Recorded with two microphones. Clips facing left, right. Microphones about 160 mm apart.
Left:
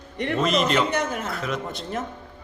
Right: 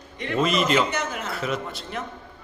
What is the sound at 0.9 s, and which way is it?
Speech, 55° left (ahead or behind).